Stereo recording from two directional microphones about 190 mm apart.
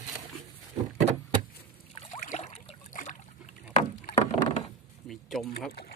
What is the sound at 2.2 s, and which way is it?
Boat, 40° left (ahead or behind).